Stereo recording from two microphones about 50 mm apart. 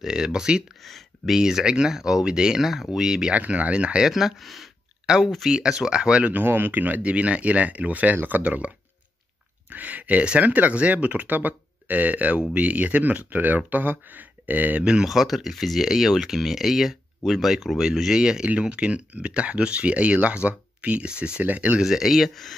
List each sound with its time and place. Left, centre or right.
0.0 s speech: centre
0.8 s a sound: centre
1.3 s speech: centre
3.3 s speech: right
4.1 s speech: centre
5.5 s speech: centre
6.3 s speech: right
10.2 s speech: right
15.0 s speech: centre
21.5 s speech: right
21.8 s speech: centre